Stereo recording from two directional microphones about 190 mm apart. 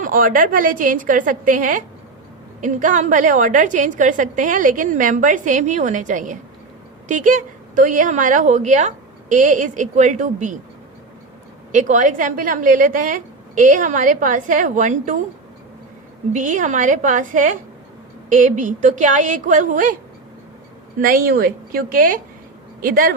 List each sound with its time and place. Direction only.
0.0 s a woman's voice: 45° right (ahead or behind)
11.7 s a woman's voice: 40° right (ahead or behind)
16.3 s a woman's voice: 40° right (ahead or behind)
21.0 s a woman's voice: 50° right (ahead or behind)